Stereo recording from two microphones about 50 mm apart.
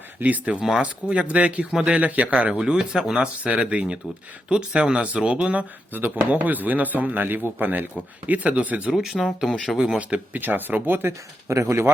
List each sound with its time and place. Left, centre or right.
0.2 s speech: right
1.7 s speech: centre
2.0 s speech: right
5.9 s speech: right
8.9 s speech: centre
9.7 s speech: centre
10.0 s speech: right
11.4 s speech: right